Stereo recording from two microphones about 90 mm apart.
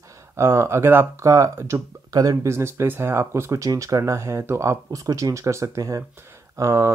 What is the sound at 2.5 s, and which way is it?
Speech, 30° right (ahead or behind).